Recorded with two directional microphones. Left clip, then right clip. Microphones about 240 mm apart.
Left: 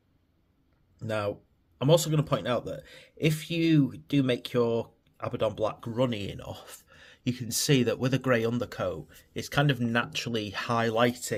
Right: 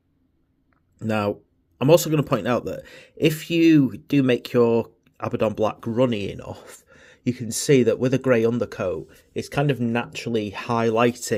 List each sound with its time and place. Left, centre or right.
0.9 s speech: right